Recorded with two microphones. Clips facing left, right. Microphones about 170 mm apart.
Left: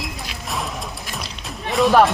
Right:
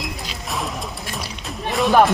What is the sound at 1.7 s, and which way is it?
Speech, centre (ahead or behind).